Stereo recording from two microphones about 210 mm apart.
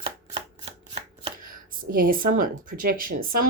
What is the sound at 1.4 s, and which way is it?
Speech, 40° right (ahead or behind).